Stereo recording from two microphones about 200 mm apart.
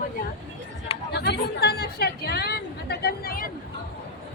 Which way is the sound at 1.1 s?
55° left (ahead or behind).